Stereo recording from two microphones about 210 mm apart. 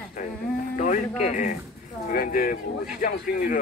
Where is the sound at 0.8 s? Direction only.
35° left (ahead or behind).